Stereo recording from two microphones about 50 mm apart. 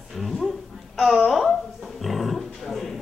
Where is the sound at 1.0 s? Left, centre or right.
Centre.